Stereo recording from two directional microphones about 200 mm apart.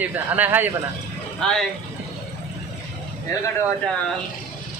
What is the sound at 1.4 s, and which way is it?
Speech, 5° left (ahead or behind).